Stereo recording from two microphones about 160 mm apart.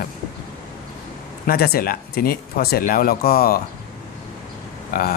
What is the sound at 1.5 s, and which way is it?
Speech, 75° left (ahead or behind).